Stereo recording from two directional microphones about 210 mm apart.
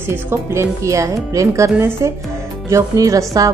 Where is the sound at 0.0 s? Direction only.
10° right (ahead or behind).